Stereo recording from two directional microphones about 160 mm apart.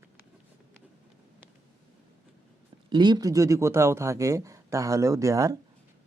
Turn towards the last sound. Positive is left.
turn(degrees=-20)  # may be behind; listen again after turning